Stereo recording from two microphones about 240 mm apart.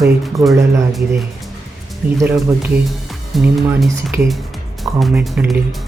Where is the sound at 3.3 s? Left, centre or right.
Centre.